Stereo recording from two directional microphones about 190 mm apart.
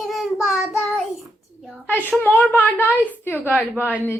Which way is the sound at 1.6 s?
5° right (ahead or behind).